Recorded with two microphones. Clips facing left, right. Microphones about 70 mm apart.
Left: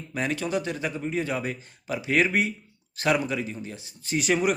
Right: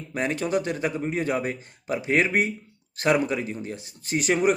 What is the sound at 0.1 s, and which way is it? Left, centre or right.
Speech, right.